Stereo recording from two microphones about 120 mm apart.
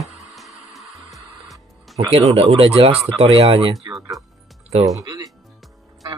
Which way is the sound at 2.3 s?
55° right (ahead or behind).